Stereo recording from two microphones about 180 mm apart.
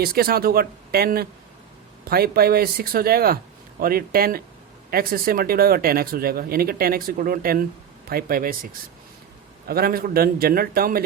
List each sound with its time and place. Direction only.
0.0 s speech: 55° right (ahead or behind)
9.6 s speech: 55° right (ahead or behind)